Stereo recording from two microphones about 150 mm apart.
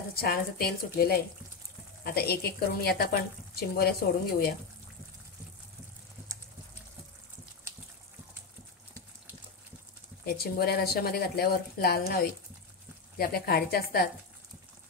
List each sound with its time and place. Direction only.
0.1 s a woman's voice: 85° left
10.2 s speech: 90° left